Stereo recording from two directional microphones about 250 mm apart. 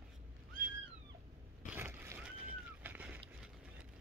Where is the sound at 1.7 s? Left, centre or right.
Centre.